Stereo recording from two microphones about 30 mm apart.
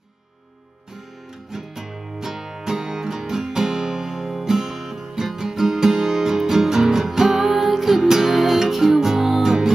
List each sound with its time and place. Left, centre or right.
1.5 s music: centre